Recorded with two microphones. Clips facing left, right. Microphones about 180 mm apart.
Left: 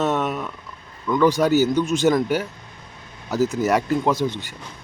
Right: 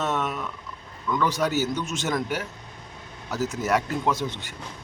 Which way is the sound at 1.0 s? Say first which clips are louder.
Left 7 dB; 30° left (ahead or behind).